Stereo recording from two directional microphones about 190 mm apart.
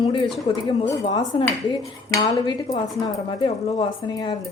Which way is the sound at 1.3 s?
25° left (ahead or behind).